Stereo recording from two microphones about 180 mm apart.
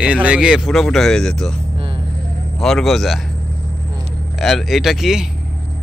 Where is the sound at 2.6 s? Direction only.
Centre (ahead or behind).